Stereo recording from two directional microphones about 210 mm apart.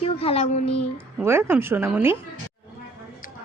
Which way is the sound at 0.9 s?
10° right (ahead or behind).